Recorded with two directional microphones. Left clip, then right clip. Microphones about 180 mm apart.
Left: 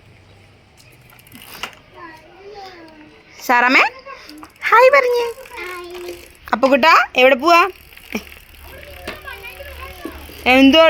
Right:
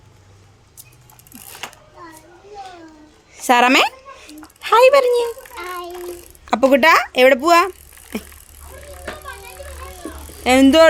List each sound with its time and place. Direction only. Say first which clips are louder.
3.3 s dog: even; 25° right (ahead or behind)
6.4 s speech: even; 15° right (ahead or behind)
10.4 s speech: left 1 dB; 5° right (ahead or behind)